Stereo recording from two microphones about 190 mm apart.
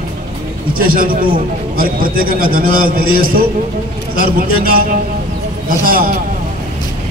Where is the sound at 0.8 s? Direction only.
50° right (ahead or behind).